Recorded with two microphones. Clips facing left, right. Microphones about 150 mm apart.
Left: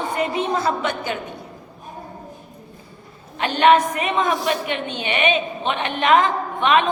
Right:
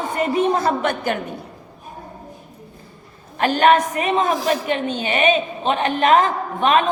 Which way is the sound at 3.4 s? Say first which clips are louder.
Even; 40° right (ahead or behind).